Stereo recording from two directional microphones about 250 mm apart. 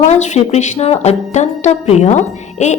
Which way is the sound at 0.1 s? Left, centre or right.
Left.